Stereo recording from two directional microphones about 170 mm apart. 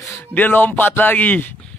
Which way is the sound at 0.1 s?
15° left (ahead or behind).